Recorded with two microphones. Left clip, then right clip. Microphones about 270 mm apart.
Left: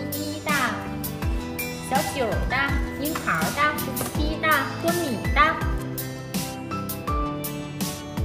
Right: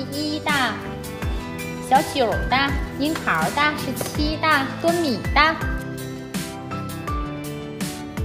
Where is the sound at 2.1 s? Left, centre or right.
Right.